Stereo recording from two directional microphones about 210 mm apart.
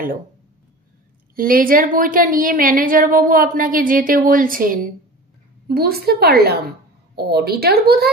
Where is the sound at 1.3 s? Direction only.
45° right (ahead or behind).